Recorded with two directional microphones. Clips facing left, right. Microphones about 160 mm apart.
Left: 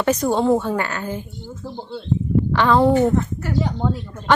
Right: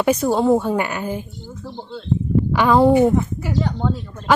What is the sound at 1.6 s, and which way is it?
Speech, 15° left (ahead or behind).